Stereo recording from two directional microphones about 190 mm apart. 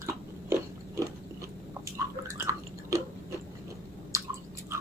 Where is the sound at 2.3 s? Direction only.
15° right (ahead or behind).